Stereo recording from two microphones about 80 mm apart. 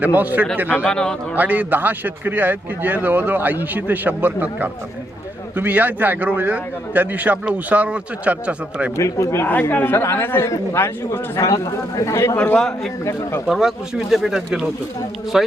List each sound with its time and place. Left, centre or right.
0.0 s a man's voice: right
0.9 s a man's voice: centre
1.4 s a man's voice: right
9.0 s speech: left
9.5 s a man's voice: left
11.3 s speech: left
12.5 s speech: centre